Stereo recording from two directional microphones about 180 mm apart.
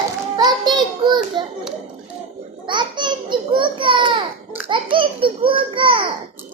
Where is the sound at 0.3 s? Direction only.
25° right (ahead or behind).